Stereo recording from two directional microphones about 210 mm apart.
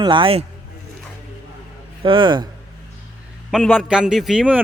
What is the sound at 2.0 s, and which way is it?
Speech, 25° right (ahead or behind).